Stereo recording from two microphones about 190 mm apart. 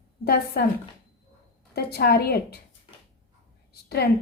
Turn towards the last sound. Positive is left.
turn(degrees=55)  # may be behind; listen again after turning